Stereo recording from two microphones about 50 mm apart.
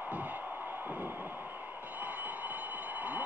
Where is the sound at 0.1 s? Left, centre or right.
Right.